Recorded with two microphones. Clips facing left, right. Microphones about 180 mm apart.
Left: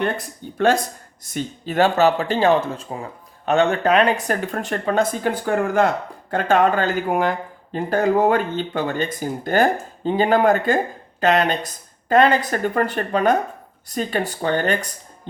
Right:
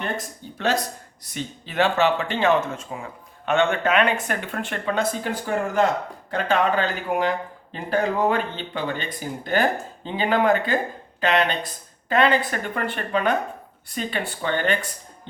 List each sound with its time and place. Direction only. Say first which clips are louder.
0.4 s speech: left 6 dB; 55° left (ahead or behind)